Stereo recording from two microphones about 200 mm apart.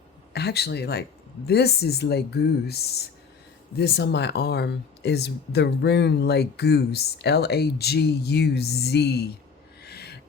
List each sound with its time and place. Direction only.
0.3 s speech: 55° left (ahead or behind)
9.8 s owl: 55° left (ahead or behind)